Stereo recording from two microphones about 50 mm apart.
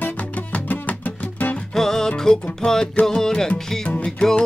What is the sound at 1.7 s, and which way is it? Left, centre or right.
Music, centre.